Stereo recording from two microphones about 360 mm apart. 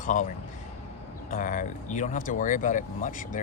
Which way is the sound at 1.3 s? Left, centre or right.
Left.